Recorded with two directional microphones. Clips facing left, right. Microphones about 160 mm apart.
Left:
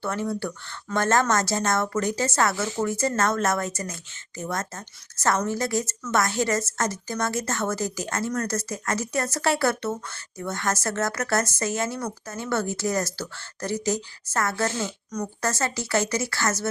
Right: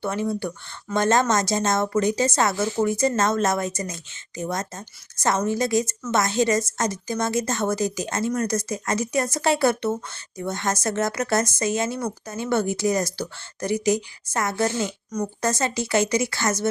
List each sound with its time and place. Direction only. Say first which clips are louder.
0.0 s a woman's voice: right 2 dB; 20° right (ahead or behind)